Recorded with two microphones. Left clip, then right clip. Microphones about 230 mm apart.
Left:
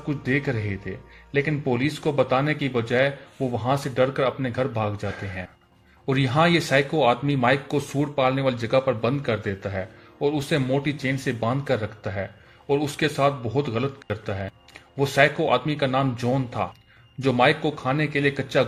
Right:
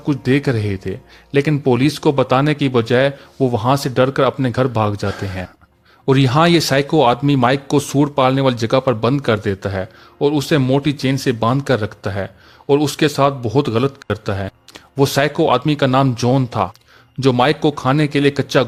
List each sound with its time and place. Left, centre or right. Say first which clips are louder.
0.1 s speech: right 8 dB; right